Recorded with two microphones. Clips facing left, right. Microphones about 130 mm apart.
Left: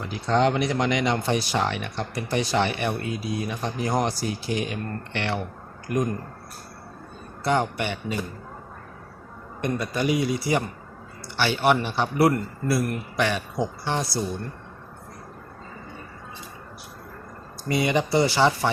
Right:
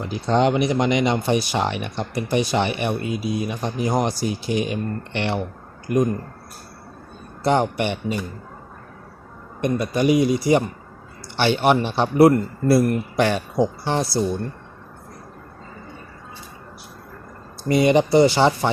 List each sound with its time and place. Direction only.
0.0 s speech: 20° right (ahead or behind)
7.4 s a man's voice: 25° right (ahead or behind)
9.6 s a man's voice: 15° right (ahead or behind); by 14.1 s 30° right (ahead or behind)
17.7 s a man's voice: 25° right (ahead or behind)